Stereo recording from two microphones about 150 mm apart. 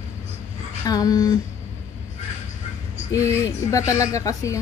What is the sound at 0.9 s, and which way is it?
Speech, 25° left (ahead or behind).